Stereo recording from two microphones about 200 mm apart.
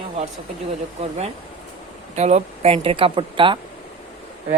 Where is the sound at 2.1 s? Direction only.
35° right (ahead or behind).